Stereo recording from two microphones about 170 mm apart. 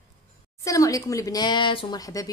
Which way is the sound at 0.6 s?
20° left (ahead or behind).